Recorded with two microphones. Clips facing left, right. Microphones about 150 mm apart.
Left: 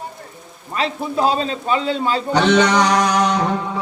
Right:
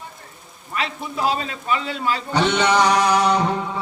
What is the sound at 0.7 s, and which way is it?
A man's voice, 30° left (ahead or behind).